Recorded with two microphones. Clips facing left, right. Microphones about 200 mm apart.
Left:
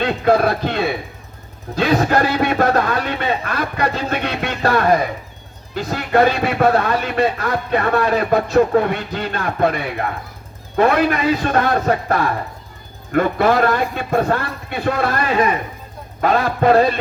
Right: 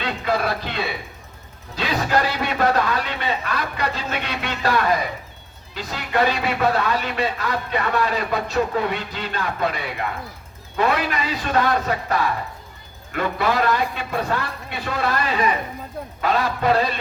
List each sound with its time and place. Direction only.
0.0 s a man's voice: 50° left (ahead or behind)